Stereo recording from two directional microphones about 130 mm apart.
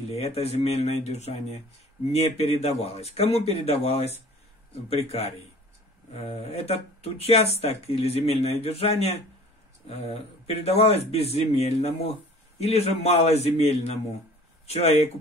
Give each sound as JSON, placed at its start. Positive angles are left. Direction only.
{"t": 0.1, "sound": "a man's voice", "side_deg": 50}